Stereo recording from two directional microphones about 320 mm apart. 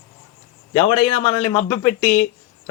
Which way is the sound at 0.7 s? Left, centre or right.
Centre.